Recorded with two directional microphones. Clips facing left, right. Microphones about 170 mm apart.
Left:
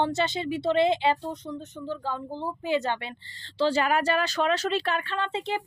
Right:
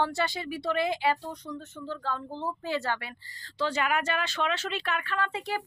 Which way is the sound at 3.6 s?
30° left (ahead or behind).